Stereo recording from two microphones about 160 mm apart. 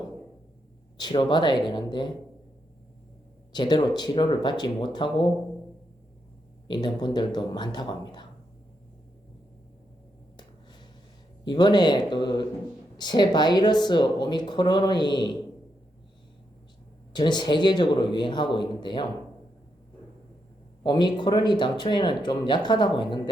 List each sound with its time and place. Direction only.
0.9 s speech: 30° left (ahead or behind)
3.5 s speech: 30° left (ahead or behind)
6.7 s speech: 30° left (ahead or behind)
11.4 s speech: 25° left (ahead or behind)
17.1 s speech: 25° left (ahead or behind)
20.8 s speech: 30° left (ahead or behind)